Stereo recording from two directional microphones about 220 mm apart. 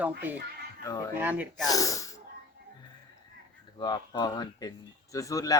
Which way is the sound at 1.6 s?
15° left (ahead or behind).